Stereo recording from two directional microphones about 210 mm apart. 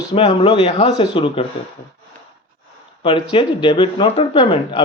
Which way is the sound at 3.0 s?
25° left (ahead or behind).